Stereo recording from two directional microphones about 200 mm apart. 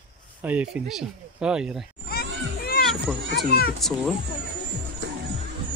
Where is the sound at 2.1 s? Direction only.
50° left (ahead or behind).